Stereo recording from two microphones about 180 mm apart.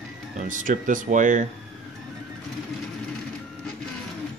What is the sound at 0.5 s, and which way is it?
Speech, 45° right (ahead or behind).